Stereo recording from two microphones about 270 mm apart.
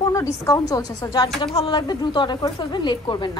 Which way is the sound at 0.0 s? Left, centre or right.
Centre.